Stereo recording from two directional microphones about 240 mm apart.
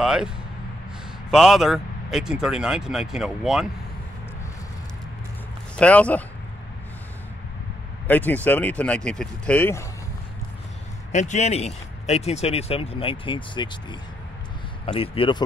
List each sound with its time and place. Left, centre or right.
0.0 s speech: centre
1.3 s speech: centre
5.8 s speech: centre
8.1 s speech: centre
11.1 s speech: left